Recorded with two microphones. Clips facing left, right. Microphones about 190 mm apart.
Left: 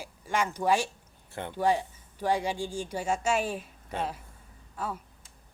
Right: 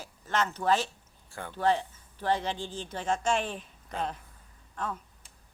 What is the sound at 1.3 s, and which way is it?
Speech, 20° left (ahead or behind).